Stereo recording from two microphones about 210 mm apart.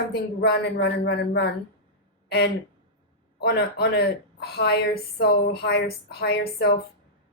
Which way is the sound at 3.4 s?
50° left (ahead or behind).